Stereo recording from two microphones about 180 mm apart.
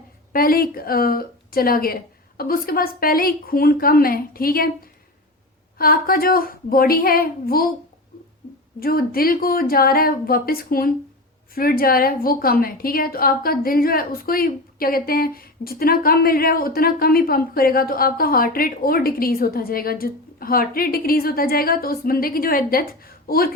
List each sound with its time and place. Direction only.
0.3 s a woman's voice: 55° left (ahead or behind)
5.7 s a woman's voice: 55° left (ahead or behind)
8.8 s a woman's voice: 55° left (ahead or behind)